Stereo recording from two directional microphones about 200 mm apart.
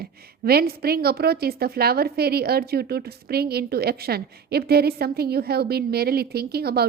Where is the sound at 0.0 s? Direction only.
50° right (ahead or behind).